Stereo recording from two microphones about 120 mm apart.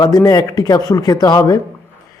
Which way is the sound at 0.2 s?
30° left (ahead or behind).